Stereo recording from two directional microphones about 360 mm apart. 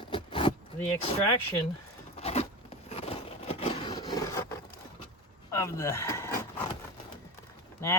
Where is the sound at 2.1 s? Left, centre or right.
Centre.